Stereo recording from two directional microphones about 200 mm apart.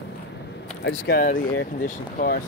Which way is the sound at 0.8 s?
50° left (ahead or behind).